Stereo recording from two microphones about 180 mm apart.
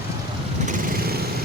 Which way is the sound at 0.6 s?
55° right (ahead or behind).